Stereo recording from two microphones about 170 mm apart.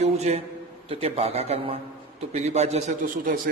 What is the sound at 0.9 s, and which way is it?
A man's voice, 35° right (ahead or behind).